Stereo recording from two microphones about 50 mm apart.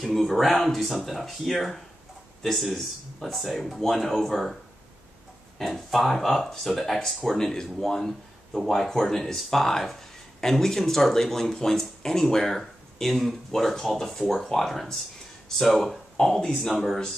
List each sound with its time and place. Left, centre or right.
0.0 s speech: centre
5.6 s speech: centre
16.6 s speech: centre